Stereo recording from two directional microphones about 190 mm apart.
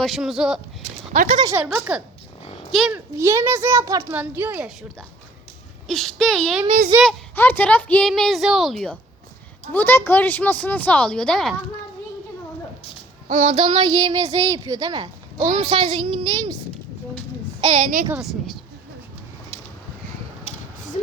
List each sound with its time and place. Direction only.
0.0 s a woman's voice: centre (ahead or behind)
1.1 s speech: 45° right (ahead or behind)
1.5 s a woman's voice: 5° right (ahead or behind)
3.2 s speech: 15° right (ahead or behind)
5.9 s a woman's voice: 5° left (ahead or behind)
13.2 s child singing: 40° right (ahead or behind)
13.6 s speech: 25° right (ahead or behind)
17.6 s a child's voice: 35° right (ahead or behind)
18.1 s a woman's voice: centre (ahead or behind)